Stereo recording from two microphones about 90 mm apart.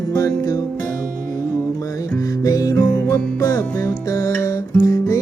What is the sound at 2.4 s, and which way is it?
Music, 40° left (ahead or behind).